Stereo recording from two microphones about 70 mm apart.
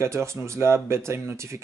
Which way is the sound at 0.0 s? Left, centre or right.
Right.